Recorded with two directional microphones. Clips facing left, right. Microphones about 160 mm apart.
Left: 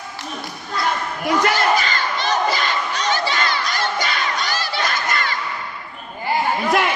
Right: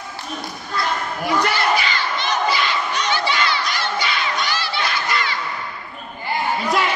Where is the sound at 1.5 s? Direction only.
45° left (ahead or behind).